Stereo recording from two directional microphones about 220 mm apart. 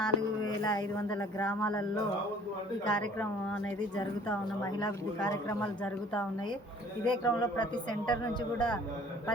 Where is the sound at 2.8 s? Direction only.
5° left (ahead or behind).